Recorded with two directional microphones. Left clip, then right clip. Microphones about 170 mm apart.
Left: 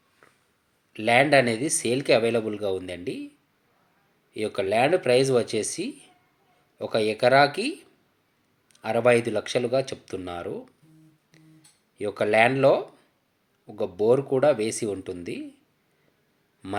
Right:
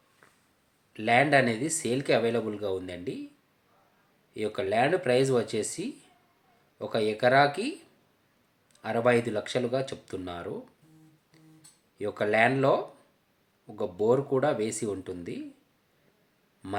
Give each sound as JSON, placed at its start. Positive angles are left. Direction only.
{"t": 0.9, "sound": "speech", "side_deg": 15}
{"t": 4.4, "sound": "speech", "side_deg": 15}
{"t": 8.8, "sound": "speech", "side_deg": 15}
{"t": 11.9, "sound": "speech", "side_deg": 15}
{"t": 16.6, "sound": "speech", "side_deg": 10}